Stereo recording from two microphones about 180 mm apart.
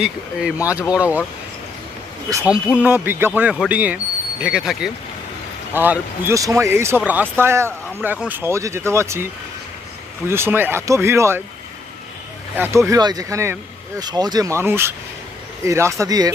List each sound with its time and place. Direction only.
0.0 s speech: 5° right (ahead or behind)
2.3 s speech: 5° right (ahead or behind)
10.2 s speech: 15° right (ahead or behind)
12.5 s speech: 10° right (ahead or behind)